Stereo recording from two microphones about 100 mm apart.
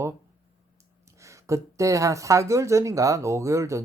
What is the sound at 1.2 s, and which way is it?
Speech, 30° right (ahead or behind).